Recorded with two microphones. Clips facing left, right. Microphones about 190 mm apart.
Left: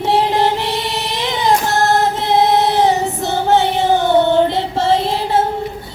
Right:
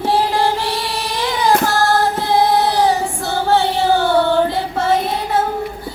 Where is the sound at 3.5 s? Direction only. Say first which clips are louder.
Left 1 dB; 20° left (ahead or behind).